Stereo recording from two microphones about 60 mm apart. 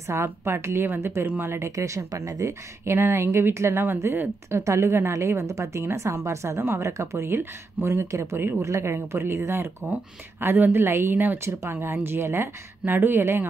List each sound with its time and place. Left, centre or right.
0.0 s speech: right
1.2 s speech: right
1.5 s speech: right
8.4 s a woman's voice: right
8.6 s a woman's voice: right